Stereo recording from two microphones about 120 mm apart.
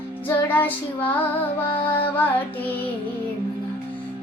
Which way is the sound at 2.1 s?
15° left (ahead or behind).